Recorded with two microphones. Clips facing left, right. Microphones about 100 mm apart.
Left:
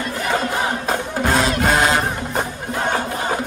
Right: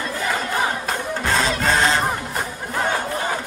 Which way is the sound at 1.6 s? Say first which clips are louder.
Left 2 dB; 15° left (ahead or behind).